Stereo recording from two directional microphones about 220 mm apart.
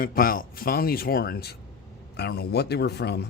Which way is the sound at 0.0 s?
40° left (ahead or behind).